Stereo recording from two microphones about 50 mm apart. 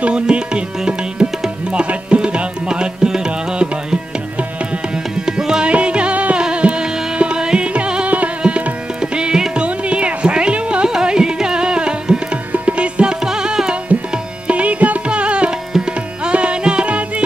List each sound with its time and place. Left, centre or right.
0.0 s music: centre
4.9 s tabla: centre
5.7 s music: right
8.4 s tabla: right
9.0 s music: centre
14.1 s tabla: right
15.7 s music: centre